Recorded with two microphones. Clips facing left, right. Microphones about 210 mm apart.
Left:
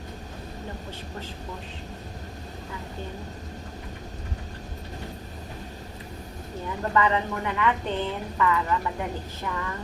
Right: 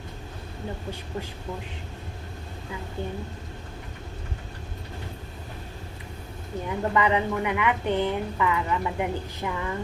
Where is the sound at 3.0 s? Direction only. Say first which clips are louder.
Right 6 dB; 15° right (ahead or behind).